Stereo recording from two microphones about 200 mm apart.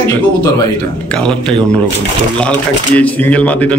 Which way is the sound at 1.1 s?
5° left (ahead or behind).